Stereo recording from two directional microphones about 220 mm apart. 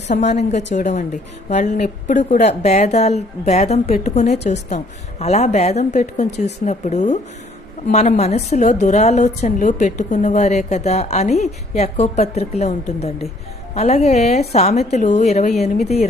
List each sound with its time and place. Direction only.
0.1 s a woman's voice: 30° left (ahead or behind)